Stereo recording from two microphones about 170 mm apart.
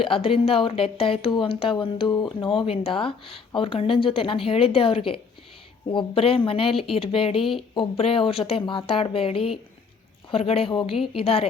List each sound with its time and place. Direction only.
0.0 s speech: 35° left (ahead or behind)